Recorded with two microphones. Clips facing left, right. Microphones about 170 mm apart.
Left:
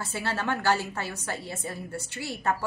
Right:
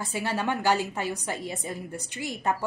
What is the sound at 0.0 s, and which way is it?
A woman's voice, 15° right (ahead or behind).